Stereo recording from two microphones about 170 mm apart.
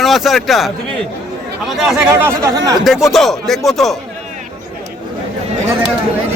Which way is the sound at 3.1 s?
Centre (ahead or behind).